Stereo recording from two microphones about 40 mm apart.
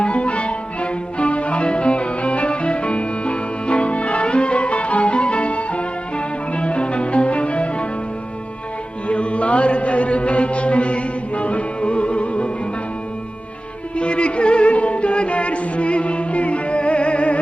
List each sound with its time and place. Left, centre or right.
0.0 s music: left
9.0 s music: left
13.9 s music: left